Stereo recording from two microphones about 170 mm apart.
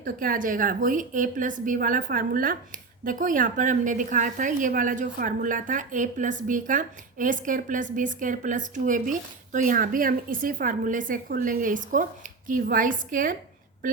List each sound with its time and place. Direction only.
0.0 s a woman's voice: 55° right (ahead or behind)